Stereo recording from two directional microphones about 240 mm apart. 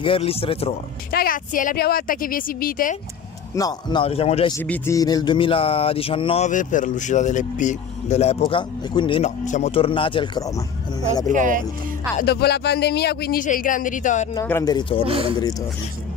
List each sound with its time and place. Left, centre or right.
0.0 s a sound: left
1.1 s speech: left
3.5 s a sound: centre
4.6 s a sound: centre
11.0 s speech: centre
11.3 s speech: right
12.2 s speech: left
14.3 s speech: centre
15.0 s speech: right